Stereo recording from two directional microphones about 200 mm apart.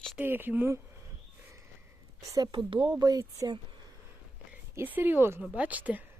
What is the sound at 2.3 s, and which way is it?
A woman's voice, 20° right (ahead or behind).